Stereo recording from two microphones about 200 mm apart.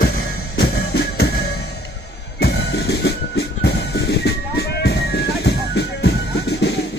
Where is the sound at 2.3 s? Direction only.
55° left (ahead or behind).